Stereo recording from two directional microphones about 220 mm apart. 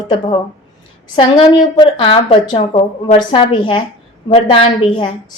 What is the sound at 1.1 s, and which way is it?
Speech, 20° left (ahead or behind).